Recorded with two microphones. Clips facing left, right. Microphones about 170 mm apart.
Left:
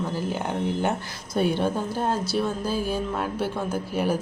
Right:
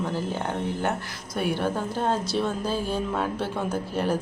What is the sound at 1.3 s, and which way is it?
A woman's voice, 25° left (ahead or behind).